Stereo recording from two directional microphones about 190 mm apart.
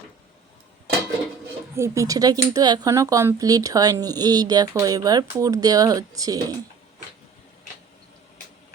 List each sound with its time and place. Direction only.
1.7 s speech: 15° right (ahead or behind)